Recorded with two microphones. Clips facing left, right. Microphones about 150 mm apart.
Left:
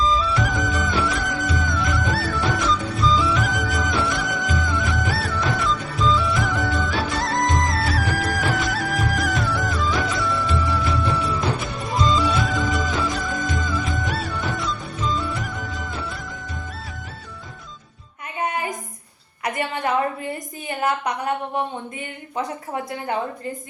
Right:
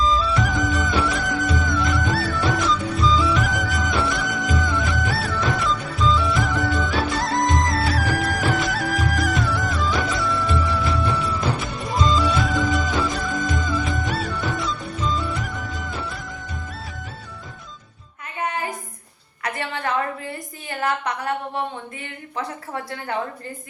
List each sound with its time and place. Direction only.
0.0 s music: centre (ahead or behind)
19.4 s a sound: 15° left (ahead or behind)
22.4 s a woman's voice: 15° left (ahead or behind)